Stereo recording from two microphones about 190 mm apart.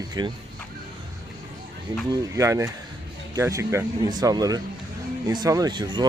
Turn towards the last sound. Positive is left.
turn(degrees=-20)  # may be behind; listen again after turning